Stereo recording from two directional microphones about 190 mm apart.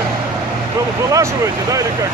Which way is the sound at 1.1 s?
15° right (ahead or behind).